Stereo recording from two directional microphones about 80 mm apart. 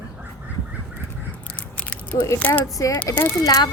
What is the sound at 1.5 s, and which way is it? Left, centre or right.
Biting, centre.